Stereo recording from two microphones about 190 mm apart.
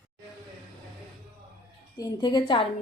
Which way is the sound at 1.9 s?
20° left (ahead or behind).